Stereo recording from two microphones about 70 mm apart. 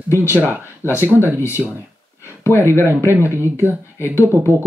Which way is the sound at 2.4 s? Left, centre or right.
Left.